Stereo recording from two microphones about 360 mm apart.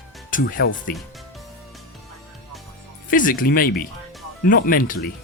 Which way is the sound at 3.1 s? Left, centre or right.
Left.